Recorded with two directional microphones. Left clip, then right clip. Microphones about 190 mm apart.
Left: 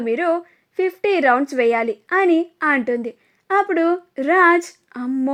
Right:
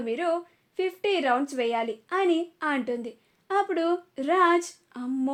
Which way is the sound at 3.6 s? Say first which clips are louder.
Left 8 dB; 40° left (ahead or behind).